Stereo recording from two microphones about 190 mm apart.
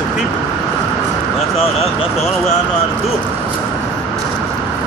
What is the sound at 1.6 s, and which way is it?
Speech, 30° left (ahead or behind).